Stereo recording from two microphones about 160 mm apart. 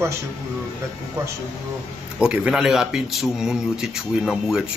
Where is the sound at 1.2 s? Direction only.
15° right (ahead or behind).